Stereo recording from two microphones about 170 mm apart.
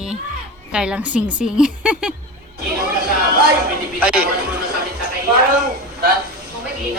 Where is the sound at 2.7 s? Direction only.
65° right (ahead or behind).